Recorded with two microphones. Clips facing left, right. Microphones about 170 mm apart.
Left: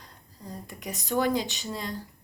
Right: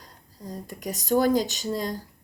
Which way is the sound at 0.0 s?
40° right (ahead or behind).